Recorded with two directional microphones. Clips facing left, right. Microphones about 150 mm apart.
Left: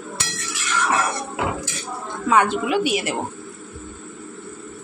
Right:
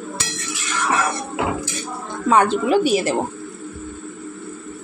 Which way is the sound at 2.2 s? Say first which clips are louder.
Right 3 dB; 35° right (ahead or behind).